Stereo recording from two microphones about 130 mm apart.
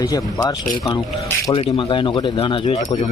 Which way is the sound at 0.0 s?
25° left (ahead or behind).